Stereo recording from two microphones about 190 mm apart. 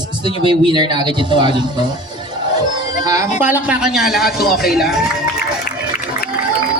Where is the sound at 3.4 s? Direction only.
10° right (ahead or behind).